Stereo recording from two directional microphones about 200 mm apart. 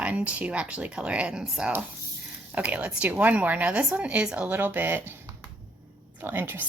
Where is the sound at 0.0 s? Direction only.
5° right (ahead or behind).